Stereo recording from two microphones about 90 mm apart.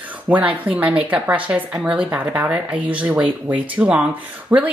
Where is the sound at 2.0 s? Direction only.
20° right (ahead or behind).